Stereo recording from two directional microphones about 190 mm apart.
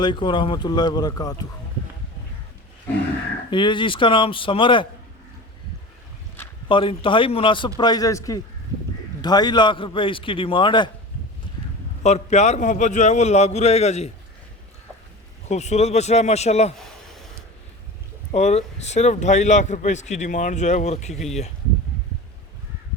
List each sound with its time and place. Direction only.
0.0 s a man's voice: 25° left (ahead or behind)
3.5 s a man's voice: 25° left (ahead or behind)
6.7 s a man's voice: 25° left (ahead or behind)
12.0 s speech: 35° left (ahead or behind)
15.4 s speech: 35° left (ahead or behind)
18.3 s speech: 35° left (ahead or behind)